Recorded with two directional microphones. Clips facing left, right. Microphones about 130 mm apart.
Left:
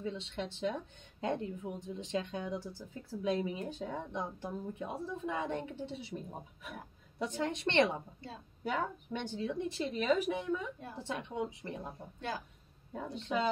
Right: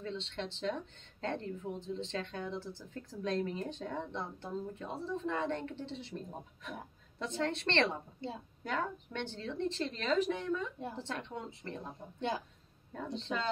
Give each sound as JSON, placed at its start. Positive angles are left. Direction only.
{"t": 0.0, "sound": "speech", "side_deg": 10}
{"t": 8.2, "sound": "a woman's voice", "side_deg": -25}
{"t": 8.6, "sound": "speech", "side_deg": 10}
{"t": 12.9, "sound": "speech", "side_deg": 10}